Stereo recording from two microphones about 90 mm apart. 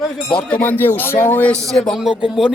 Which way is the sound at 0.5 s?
20° left (ahead or behind).